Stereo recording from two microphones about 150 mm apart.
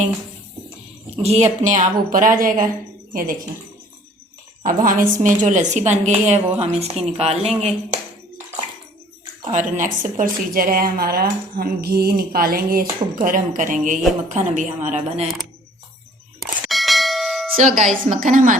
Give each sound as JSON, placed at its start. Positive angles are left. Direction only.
{"t": 1.1, "sound": "a woman's voice", "side_deg": -45}
{"t": 1.5, "sound": "a woman's voice", "side_deg": -55}
{"t": 4.6, "sound": "a woman's voice", "side_deg": -65}
{"t": 9.4, "sound": "a woman's voice", "side_deg": -55}
{"t": 16.4, "sound": "clang", "side_deg": 0}
{"t": 17.6, "sound": "a woman's voice", "side_deg": -55}